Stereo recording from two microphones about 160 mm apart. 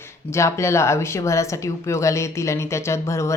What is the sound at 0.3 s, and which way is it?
Speech, 20° left (ahead or behind).